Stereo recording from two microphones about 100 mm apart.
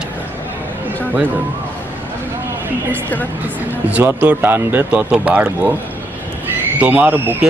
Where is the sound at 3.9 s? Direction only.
20° right (ahead or behind).